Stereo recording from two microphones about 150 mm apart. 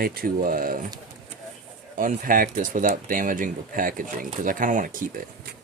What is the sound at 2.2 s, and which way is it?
Speech, 65° right (ahead or behind).